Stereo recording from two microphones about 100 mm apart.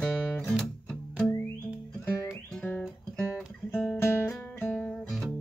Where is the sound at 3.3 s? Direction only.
20° left (ahead or behind).